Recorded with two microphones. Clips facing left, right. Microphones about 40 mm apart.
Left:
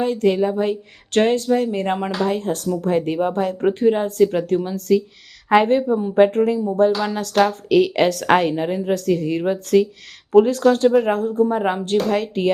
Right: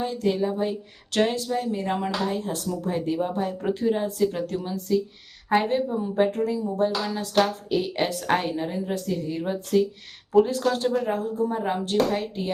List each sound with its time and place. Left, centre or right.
0.0 s speech: left
1.1 s speech: left
1.9 s speech: left
2.2 s speech: left
3.6 s speech: left
5.5 s a woman's voice: left